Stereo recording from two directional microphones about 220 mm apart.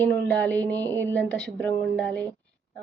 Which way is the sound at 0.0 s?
5° left (ahead or behind).